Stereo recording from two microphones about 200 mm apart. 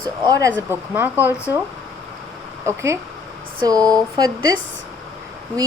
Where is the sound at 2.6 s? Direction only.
15° right (ahead or behind).